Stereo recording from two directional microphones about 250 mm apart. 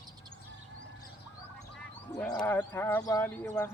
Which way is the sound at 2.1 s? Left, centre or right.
Centre.